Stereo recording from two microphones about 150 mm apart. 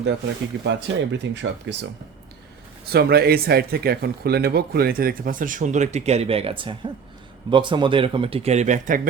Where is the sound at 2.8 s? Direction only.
90° right.